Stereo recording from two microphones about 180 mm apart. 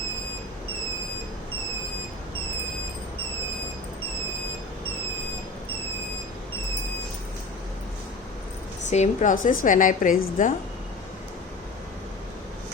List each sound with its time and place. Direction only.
8.9 s a woman's voice: 45° left (ahead or behind)